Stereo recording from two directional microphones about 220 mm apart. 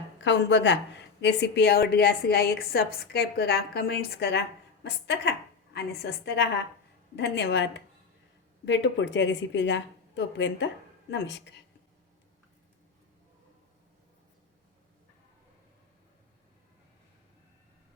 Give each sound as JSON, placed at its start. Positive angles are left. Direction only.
{"t": 0.2, "sound": "a woman's voice", "side_deg": 55}